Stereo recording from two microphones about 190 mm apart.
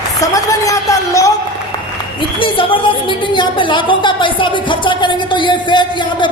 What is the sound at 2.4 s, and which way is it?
A woman's voice, 25° left (ahead or behind).